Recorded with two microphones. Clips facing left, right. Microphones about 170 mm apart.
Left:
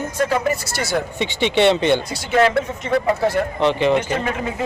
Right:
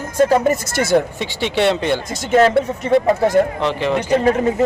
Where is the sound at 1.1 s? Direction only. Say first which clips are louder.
Left 1 dB; centre (ahead or behind).